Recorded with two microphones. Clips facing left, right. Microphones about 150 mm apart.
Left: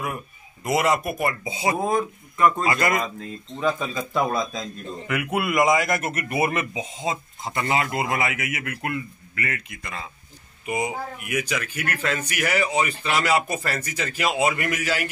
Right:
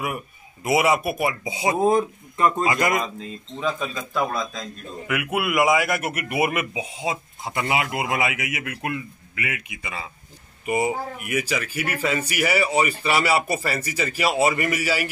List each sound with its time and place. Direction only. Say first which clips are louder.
0.7 s a man's voice: right 2 dB; 5° right (ahead or behind)
3.5 s a man's voice: left 2 dB; centre (ahead or behind)